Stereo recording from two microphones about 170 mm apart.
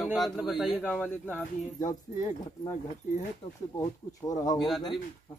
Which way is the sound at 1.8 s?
50° left (ahead or behind).